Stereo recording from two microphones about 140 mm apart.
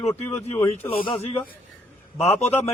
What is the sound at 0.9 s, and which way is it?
A man's voice, 40° left (ahead or behind).